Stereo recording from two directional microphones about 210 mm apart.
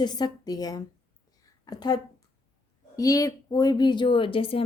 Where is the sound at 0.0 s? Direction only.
20° left (ahead or behind).